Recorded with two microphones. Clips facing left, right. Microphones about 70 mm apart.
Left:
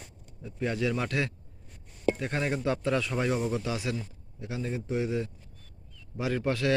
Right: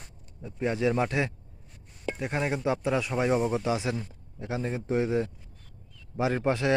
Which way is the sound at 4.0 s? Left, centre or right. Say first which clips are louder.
Right 2 dB; right.